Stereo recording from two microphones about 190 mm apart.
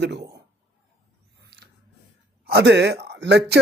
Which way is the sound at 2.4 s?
60° right (ahead or behind).